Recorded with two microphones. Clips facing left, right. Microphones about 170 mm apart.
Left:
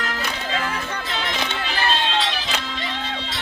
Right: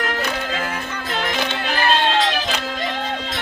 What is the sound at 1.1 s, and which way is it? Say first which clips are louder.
Music: right 5 dB; 50° right (ahead or behind).